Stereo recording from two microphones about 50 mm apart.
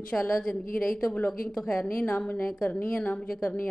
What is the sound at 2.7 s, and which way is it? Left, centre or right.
Speech, left.